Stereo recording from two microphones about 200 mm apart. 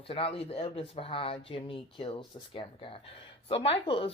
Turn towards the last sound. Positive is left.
turn(degrees=25)  # may be behind; listen again after turning